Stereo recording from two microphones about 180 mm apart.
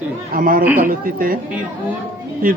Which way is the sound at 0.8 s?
50° right (ahead or behind).